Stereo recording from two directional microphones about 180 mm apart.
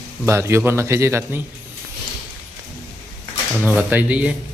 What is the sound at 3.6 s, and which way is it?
Speech, 10° right (ahead or behind).